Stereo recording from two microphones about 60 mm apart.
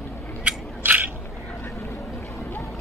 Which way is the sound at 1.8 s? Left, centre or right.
Left.